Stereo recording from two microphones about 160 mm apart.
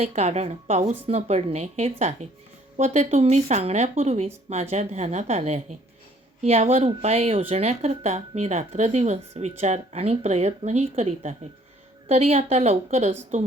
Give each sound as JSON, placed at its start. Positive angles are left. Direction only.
{"t": 0.0, "sound": "a woman's voice", "side_deg": -40}